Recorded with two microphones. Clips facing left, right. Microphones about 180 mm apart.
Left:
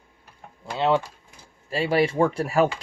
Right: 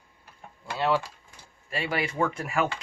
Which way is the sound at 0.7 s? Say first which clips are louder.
Left 4 dB; 20° left (ahead or behind).